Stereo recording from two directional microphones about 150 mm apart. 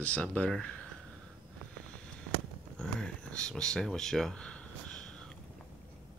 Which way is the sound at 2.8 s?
5° left (ahead or behind).